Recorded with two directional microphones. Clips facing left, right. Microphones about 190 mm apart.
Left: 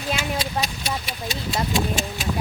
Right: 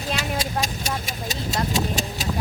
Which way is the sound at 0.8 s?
45° right (ahead or behind).